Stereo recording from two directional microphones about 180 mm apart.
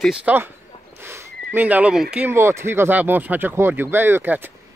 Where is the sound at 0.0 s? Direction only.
5° right (ahead or behind).